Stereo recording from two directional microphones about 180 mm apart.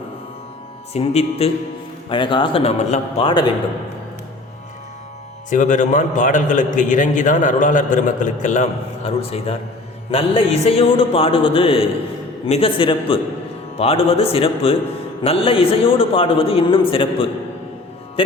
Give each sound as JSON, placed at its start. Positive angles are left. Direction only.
{"t": 0.9, "sound": "a man's voice", "side_deg": 35}
{"t": 5.5, "sound": "a man's voice", "side_deg": 45}